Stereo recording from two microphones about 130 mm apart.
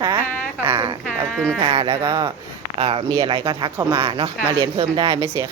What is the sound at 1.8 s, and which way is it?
Speech, 20° right (ahead or behind).